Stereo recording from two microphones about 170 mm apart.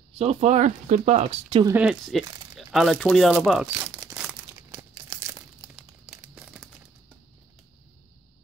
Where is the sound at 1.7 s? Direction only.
5° right (ahead or behind).